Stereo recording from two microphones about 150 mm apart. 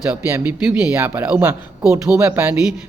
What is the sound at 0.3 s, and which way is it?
A man's voice, 15° right (ahead or behind).